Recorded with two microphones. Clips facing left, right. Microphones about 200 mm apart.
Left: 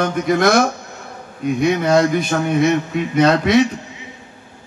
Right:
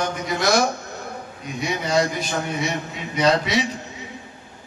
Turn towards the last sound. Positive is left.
turn(degrees=55)  # may be behind; listen again after turning